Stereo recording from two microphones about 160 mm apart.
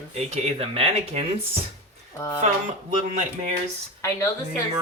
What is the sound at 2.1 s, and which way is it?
Speech, 15° left (ahead or behind).